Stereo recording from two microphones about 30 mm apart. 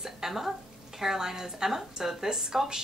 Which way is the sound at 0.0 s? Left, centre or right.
Centre.